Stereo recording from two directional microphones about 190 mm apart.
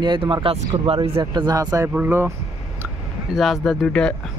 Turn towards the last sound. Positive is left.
turn(degrees=5)  # may be behind; listen again after turning